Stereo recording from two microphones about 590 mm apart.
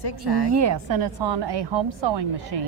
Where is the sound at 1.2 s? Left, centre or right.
Right.